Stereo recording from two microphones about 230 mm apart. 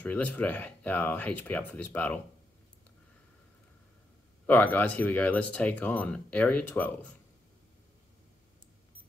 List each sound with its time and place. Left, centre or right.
0.0 s speech: centre
4.5 s speech: centre